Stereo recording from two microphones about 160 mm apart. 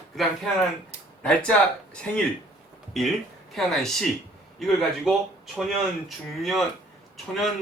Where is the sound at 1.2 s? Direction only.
5° left (ahead or behind).